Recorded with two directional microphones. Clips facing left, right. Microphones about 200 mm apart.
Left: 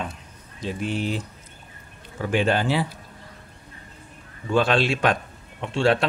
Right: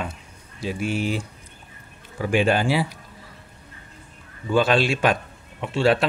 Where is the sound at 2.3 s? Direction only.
10° right (ahead or behind).